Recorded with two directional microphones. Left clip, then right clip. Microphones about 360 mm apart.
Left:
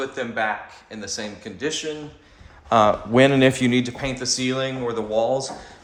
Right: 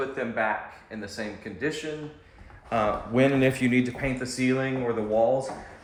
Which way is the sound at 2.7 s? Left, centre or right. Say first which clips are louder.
Left 9 dB; left.